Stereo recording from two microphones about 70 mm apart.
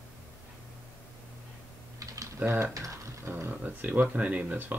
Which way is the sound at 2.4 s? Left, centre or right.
Right.